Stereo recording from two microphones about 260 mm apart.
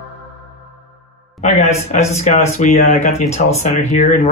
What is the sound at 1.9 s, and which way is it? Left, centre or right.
Speech, left.